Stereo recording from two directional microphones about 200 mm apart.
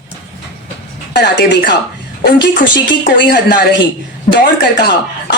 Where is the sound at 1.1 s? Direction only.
60° left (ahead or behind).